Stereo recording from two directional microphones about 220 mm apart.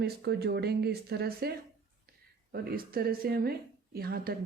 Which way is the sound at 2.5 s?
45° right (ahead or behind).